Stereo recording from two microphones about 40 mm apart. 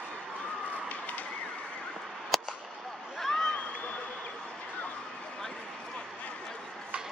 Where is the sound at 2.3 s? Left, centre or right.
Centre.